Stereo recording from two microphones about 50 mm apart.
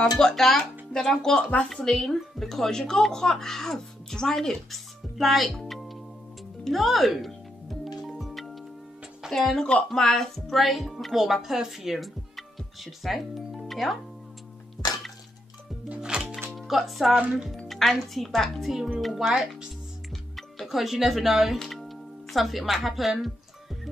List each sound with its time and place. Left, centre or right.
0.0 s speech: centre
5.7 s music: centre
6.6 s a woman's voice: centre
8.1 s music: centre
9.3 s a woman's voice: centre
13.7 s music: centre
16.0 s music: centre
16.5 s a woman's voice: centre
20.6 s a woman's voice: centre